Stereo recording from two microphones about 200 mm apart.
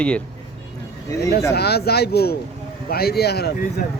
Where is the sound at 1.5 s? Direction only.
55° left (ahead or behind).